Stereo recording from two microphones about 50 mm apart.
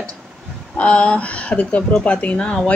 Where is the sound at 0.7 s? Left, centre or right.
Left.